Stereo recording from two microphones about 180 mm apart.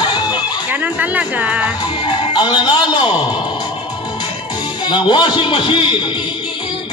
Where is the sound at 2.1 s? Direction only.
25° left (ahead or behind).